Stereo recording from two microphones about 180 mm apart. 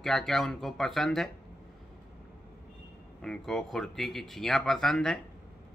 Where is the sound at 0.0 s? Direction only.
Centre (ahead or behind).